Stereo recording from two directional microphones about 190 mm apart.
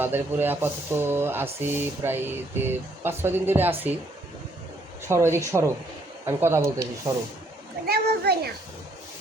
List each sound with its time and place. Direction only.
0.0 s speech: 10° right (ahead or behind)
5.0 s speech: 15° right (ahead or behind)
7.9 s a child's voice: 55° right (ahead or behind)